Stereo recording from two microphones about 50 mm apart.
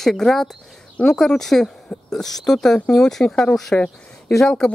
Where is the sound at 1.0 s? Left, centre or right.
Left.